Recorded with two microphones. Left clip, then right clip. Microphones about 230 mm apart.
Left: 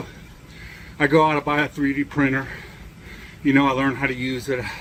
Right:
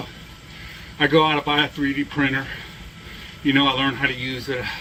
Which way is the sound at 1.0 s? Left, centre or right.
Centre.